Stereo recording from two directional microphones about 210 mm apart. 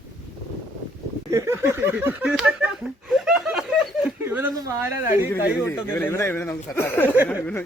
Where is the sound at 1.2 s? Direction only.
15° right (ahead or behind).